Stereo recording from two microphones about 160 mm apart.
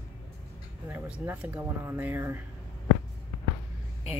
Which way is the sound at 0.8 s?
10° right (ahead or behind).